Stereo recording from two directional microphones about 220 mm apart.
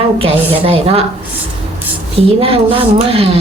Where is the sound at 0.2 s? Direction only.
25° right (ahead or behind).